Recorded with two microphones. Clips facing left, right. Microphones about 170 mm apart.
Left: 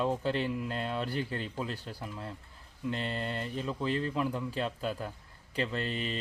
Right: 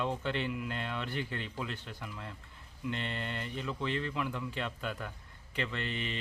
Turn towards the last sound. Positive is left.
turn(degrees=35)  # may be behind; listen again after turning